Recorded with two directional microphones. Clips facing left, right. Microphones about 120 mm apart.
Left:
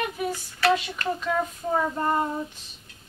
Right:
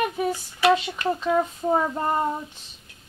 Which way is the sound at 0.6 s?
20° right (ahead or behind).